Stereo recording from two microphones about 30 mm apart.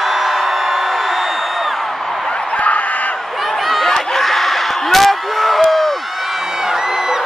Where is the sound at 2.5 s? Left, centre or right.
Left.